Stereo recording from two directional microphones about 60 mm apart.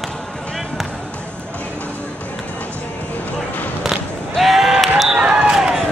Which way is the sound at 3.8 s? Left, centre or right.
Centre.